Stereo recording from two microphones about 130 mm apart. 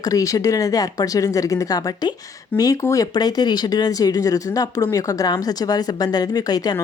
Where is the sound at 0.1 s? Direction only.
25° left (ahead or behind).